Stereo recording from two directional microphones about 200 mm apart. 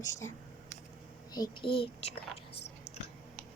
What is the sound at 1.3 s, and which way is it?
Speech, 20° left (ahead or behind).